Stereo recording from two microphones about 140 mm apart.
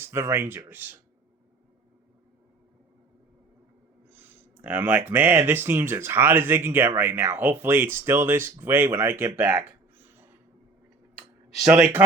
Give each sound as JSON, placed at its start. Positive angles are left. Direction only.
{"t": 0.0, "sound": "speech", "side_deg": -20}
{"t": 4.1, "sound": "speech", "side_deg": -10}
{"t": 11.5, "sound": "speech", "side_deg": 0}